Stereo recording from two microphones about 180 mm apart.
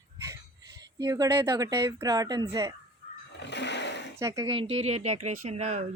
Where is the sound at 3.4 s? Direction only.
75° left (ahead or behind).